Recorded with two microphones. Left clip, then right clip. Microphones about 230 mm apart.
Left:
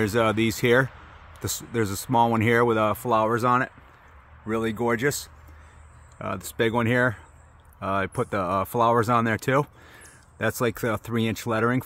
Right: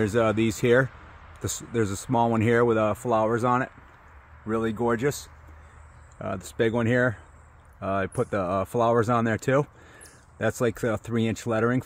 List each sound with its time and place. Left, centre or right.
0.0 s speech: centre
1.4 s speech: centre
2.0 s speech: centre
6.1 s speech: centre